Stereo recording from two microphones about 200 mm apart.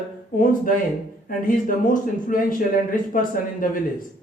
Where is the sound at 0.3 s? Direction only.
40° left (ahead or behind).